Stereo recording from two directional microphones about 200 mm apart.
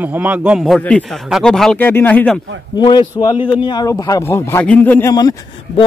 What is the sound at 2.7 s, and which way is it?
A man's voice, 20° left (ahead or behind).